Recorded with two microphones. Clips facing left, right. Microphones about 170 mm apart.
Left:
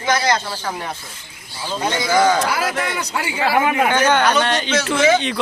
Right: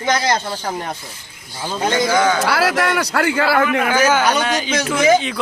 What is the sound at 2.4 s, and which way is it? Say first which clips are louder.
A man's voice: right 4 dB; 75° right (ahead or behind).